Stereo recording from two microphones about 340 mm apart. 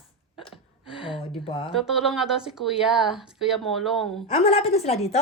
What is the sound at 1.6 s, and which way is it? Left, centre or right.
A woman's voice, centre.